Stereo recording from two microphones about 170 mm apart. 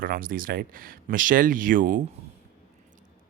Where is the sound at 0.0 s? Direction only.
55° right (ahead or behind).